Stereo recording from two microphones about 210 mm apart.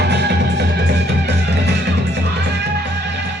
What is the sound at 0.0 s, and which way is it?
Music, 50° right (ahead or behind).